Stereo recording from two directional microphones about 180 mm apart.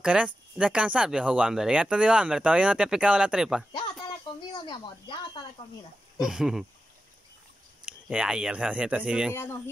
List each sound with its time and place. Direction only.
0.0 s speech: 5° right (ahead or behind)
4.4 s speech: 25° left (ahead or behind)
6.1 s speech: centre (ahead or behind)
7.8 s speech: 5° right (ahead or behind)
9.3 s speech: 15° left (ahead or behind)